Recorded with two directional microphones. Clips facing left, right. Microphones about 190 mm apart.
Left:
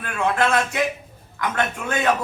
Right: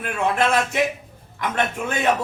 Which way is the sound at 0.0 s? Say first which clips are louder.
Even; 20° right (ahead or behind).